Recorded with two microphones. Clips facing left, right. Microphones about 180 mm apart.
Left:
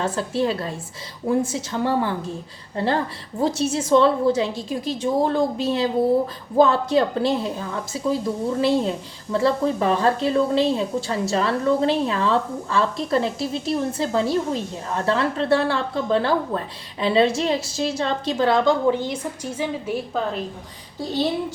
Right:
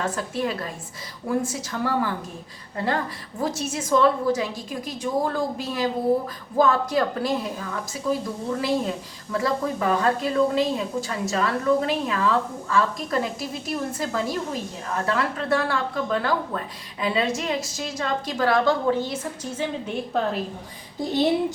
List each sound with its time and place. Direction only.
0.0 s a woman's voice: 30° left (ahead or behind); by 20.0 s 10° left (ahead or behind)
21.0 s speech: 15° right (ahead or behind)